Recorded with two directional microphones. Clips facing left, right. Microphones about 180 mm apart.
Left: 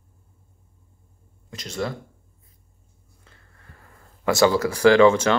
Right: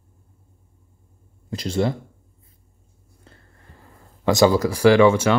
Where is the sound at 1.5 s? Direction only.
30° right (ahead or behind).